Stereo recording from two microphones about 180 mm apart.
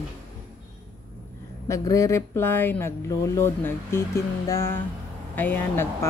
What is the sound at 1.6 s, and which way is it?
Speech, 15° left (ahead or behind).